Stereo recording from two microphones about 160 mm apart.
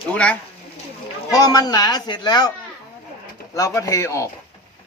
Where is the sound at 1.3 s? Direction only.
20° left (ahead or behind).